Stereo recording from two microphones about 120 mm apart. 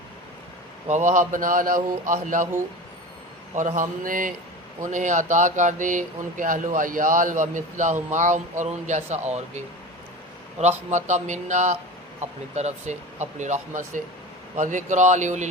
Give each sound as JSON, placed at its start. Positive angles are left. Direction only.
{"t": 0.9, "sound": "speech", "side_deg": -90}
{"t": 3.5, "sound": "speech", "side_deg": -90}
{"t": 12.2, "sound": "speech", "side_deg": -75}